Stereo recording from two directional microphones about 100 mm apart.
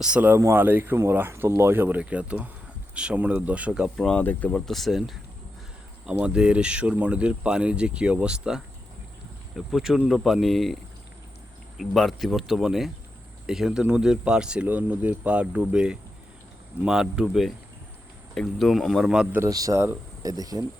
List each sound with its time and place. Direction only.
0.0 s speech: 15° right (ahead or behind)
3.9 s speech: 5° left (ahead or behind)
4.2 s speech: 15° left (ahead or behind); by 5.1 s centre (ahead or behind)
6.1 s speech: 10° right (ahead or behind)
11.8 s speech: centre (ahead or behind)
19.5 s speech: 35° right (ahead or behind)
20.2 s speech: 40° right (ahead or behind)